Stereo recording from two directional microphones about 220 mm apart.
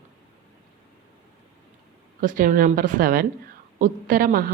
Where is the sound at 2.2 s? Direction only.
40° right (ahead or behind).